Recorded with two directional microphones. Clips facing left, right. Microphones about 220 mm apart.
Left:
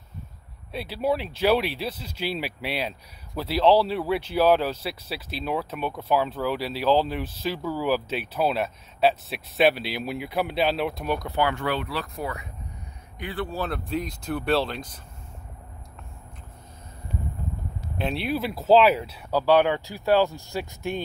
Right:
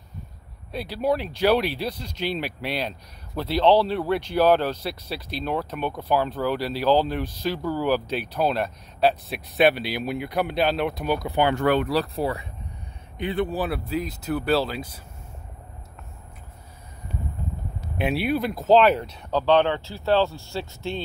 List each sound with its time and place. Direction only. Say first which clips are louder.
0.7 s speech: right 1 dB; centre (ahead or behind)
11.2 s speech: right 3 dB; 15° right (ahead or behind)
11.5 s speech: right 7 dB; 50° right (ahead or behind); by 12.4 s 35° right (ahead or behind)
13.2 s speech: right 5 dB; 20° right (ahead or behind); by 14.9 s 5° right (ahead or behind)
17.9 s speech: right 3 dB; 5° right (ahead or behind); by 21.0 s 15° left (ahead or behind)